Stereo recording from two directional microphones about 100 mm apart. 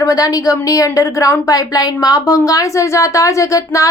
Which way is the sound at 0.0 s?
35° left (ahead or behind).